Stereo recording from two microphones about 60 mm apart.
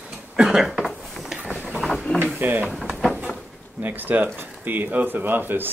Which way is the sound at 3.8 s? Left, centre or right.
Right.